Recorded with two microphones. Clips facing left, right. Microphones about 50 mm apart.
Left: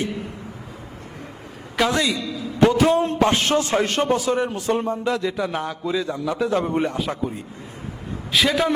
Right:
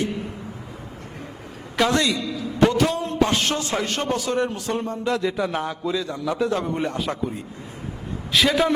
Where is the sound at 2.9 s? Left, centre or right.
Left.